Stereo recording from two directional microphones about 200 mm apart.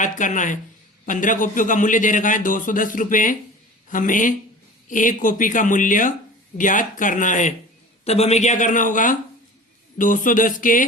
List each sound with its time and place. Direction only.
0.0 s a man's voice: 40° left (ahead or behind)